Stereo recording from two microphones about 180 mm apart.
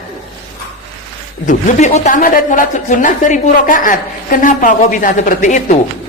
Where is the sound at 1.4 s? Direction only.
45° left (ahead or behind).